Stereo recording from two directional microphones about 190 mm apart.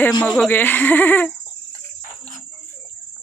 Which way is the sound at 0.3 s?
5° left (ahead or behind).